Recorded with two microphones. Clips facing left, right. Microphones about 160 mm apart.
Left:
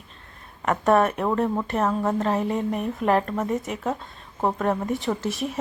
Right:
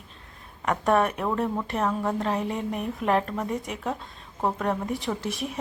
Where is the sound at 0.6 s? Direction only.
Centre (ahead or behind).